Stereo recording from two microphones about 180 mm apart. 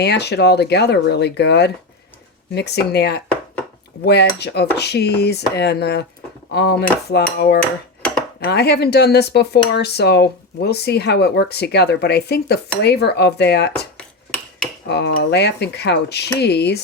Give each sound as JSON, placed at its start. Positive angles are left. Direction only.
{"t": 0.0, "sound": "speech", "side_deg": 65}
{"t": 13.7, "sound": "a sound", "side_deg": 5}
{"t": 14.8, "sound": "speech", "side_deg": 65}